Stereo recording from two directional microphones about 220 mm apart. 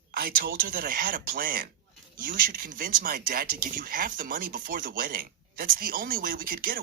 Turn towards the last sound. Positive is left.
turn(degrees=-40)  # may be behind; listen again after turning